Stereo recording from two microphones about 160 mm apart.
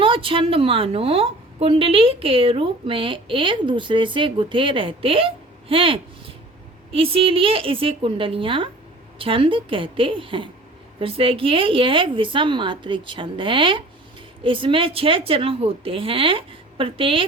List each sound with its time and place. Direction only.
0.0 s a woman's voice: 35° right (ahead or behind)